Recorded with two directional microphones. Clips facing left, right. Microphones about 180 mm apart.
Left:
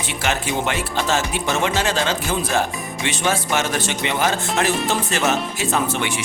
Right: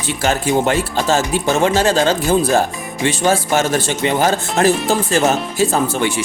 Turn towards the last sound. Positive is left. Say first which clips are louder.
# right 5 dB
turn(degrees=-30)  # may be behind; listen again after turning